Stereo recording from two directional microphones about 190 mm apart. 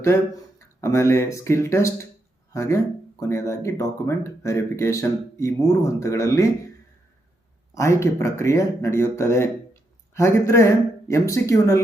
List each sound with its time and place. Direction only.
0.8 s speech: 15° left (ahead or behind)
7.7 s speech: 15° left (ahead or behind)